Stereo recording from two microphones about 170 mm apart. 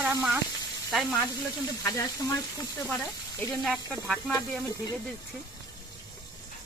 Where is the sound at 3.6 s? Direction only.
5° left (ahead or behind).